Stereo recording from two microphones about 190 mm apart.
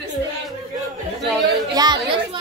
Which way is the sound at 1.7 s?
20° right (ahead or behind).